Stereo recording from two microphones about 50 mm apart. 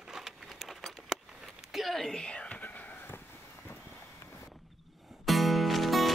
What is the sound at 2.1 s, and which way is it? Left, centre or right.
Whispering, left.